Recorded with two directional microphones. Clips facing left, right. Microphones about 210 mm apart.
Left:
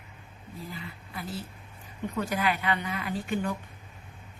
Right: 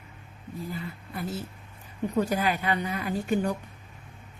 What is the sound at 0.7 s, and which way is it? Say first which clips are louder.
A woman's voice: right 5 dB; 45° right (ahead or behind).